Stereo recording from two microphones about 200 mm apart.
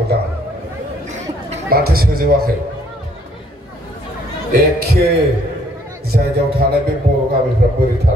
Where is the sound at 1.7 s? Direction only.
50° right (ahead or behind).